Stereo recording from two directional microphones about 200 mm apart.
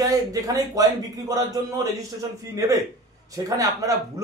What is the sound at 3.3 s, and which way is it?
Speech, 15° right (ahead or behind).